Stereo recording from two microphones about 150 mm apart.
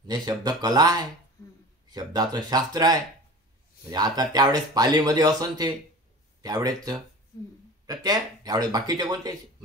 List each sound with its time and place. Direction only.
0.0 s speech: 30° right (ahead or behind)